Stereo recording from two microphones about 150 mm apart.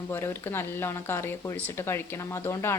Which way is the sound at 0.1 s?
15° left (ahead or behind).